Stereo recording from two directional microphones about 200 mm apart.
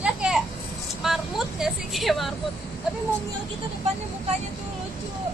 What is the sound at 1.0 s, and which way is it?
Vehicle, centre (ahead or behind).